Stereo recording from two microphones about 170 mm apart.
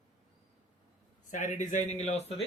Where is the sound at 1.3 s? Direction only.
45° left (ahead or behind).